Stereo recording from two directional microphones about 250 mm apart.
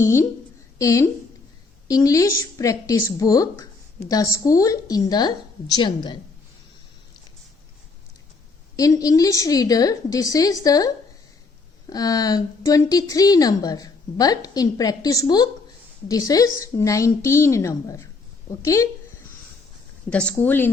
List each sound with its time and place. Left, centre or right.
0.0 s speech: centre
8.7 s speech: centre
20.1 s a woman's voice: centre